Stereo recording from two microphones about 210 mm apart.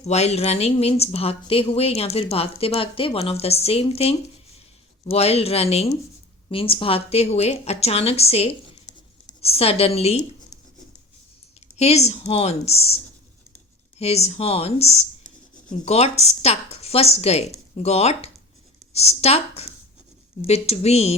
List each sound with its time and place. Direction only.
0.0 s a woman's voice: 30° left (ahead or behind)
11.8 s speech: 30° left (ahead or behind)
14.0 s speech: 30° left (ahead or behind)